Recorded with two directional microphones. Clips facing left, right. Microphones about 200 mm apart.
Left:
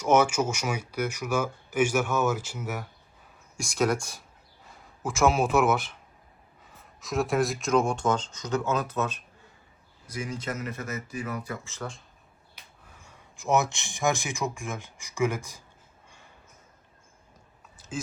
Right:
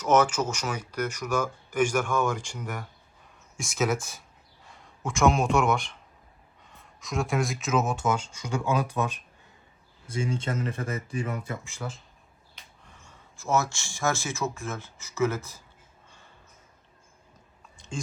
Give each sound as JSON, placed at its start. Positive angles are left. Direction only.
{"t": 0.0, "sound": "speech", "side_deg": 10}
{"t": 10.1, "sound": "speech", "side_deg": -30}
{"t": 11.6, "sound": "speech", "side_deg": -10}
{"t": 12.8, "sound": "speech", "side_deg": 10}
{"t": 17.7, "sound": "chewing", "side_deg": 5}